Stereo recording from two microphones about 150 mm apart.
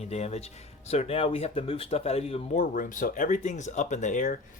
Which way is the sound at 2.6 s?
65° left (ahead or behind).